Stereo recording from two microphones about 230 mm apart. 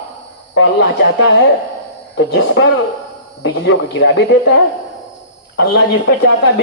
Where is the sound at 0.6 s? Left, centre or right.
Left.